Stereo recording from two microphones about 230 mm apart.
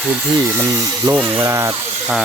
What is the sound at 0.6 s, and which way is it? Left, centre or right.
Speech, centre.